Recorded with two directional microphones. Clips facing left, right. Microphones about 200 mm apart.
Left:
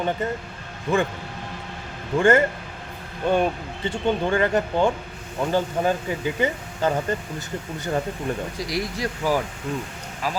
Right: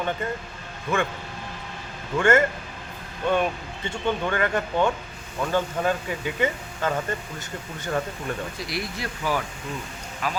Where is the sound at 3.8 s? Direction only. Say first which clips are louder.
Left 3 dB; 30° left (ahead or behind).